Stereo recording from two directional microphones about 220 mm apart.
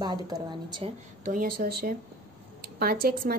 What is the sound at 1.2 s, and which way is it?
A woman's voice, 40° right (ahead or behind).